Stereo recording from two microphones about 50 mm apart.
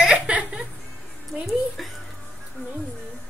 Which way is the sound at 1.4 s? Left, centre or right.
Centre.